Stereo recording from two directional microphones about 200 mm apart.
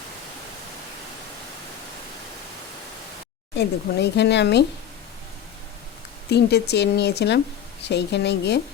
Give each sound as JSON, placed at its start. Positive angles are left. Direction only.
{"t": 3.6, "sound": "speech", "side_deg": 55}
{"t": 6.3, "sound": "speech", "side_deg": 55}